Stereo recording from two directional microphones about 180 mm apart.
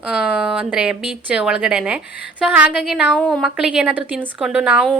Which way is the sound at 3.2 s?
10° left (ahead or behind).